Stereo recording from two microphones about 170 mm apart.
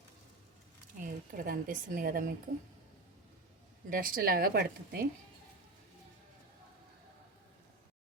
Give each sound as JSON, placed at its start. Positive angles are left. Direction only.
{"t": 0.9, "sound": "speech", "side_deg": -55}
{"t": 3.8, "sound": "a woman's voice", "side_deg": -55}